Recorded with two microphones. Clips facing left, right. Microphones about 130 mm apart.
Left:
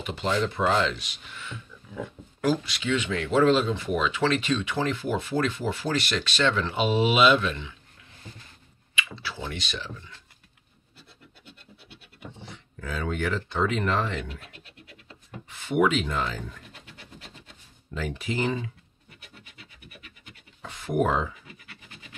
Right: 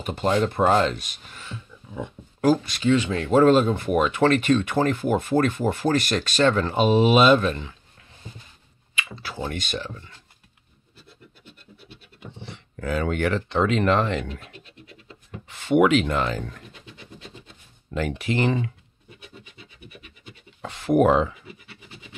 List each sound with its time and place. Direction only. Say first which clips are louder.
0.0 s speech: right 4 dB; 45° right (ahead or behind); by 2.0 s 30° right (ahead or behind)
2.4 s speech: right 6 dB; 45° right (ahead or behind)
8.9 s speech: right 1 dB; 45° right (ahead or behind)
12.4 s speech: right 9 dB; 70° right (ahead or behind)
15.4 s speech: right 5 dB; 85° right; by 16.6 s 65° right (ahead or behind)
17.9 s speech: right 5 dB; 70° right (ahead or behind)
20.6 s speech: right 7 dB; 75° right (ahead or behind)
21.6 s scratch: right 3 dB; 20° right (ahead or behind)